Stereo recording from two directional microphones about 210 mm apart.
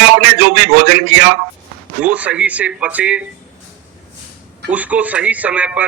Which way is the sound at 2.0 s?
5° right (ahead or behind).